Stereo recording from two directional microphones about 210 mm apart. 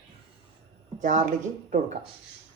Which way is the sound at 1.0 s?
40° right (ahead or behind).